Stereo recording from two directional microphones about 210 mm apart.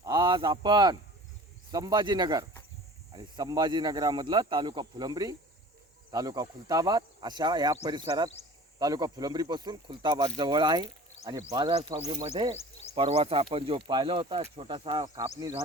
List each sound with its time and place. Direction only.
0.0 s speech: 20° right (ahead or behind)
12.0 s speech: 30° right (ahead or behind)